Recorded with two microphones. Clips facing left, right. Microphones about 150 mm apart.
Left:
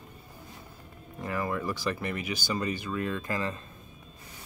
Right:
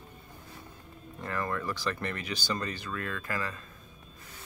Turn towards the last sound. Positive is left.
turn(degrees=25)  # may be behind; listen again after turning